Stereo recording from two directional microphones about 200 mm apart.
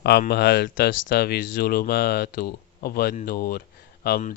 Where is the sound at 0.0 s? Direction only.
55° left (ahead or behind).